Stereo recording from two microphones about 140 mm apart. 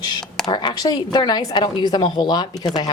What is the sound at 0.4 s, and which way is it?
Speech, 30° left (ahead or behind).